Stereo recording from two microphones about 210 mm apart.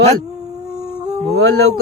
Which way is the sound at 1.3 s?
50° right (ahead or behind).